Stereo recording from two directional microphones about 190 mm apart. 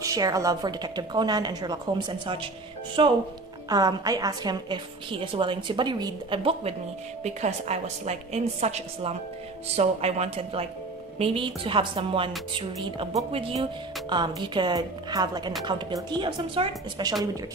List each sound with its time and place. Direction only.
0.0 s a woman's voice: 15° right (ahead or behind)